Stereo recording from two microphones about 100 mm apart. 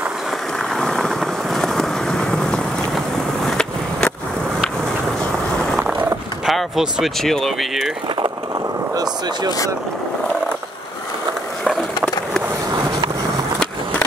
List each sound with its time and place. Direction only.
0.7 s vehicle: 5° left (ahead or behind)
3.4 s skateboard: 10° left (ahead or behind)
6.4 s speech: 5° right (ahead or behind)
8.9 s speech: 40° right (ahead or behind)
11.6 s skateboard: centre (ahead or behind)